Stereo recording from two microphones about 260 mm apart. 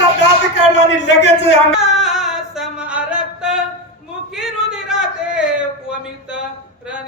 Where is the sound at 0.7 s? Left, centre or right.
Left.